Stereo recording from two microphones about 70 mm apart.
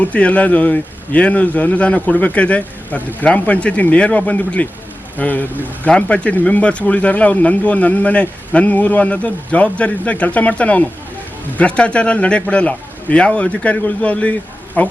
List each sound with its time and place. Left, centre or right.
0.0 s a man's voice: centre